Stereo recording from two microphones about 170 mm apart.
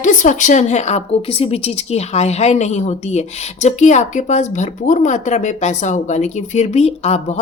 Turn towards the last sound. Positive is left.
turn(degrees=40)  # may be behind; listen again after turning